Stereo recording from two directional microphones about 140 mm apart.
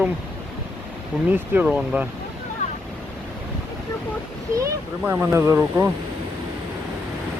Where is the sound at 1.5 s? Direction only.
10° right (ahead or behind).